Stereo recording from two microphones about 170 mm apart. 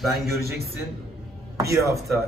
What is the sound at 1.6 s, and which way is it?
Speech, 15° right (ahead or behind).